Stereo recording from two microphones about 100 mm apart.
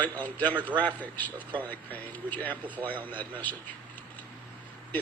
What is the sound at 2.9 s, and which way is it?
Speech, 15° left (ahead or behind).